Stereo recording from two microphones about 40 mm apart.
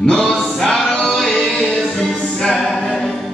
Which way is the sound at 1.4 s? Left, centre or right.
Centre.